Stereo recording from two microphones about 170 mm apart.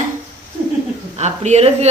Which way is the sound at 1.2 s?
40° right (ahead or behind).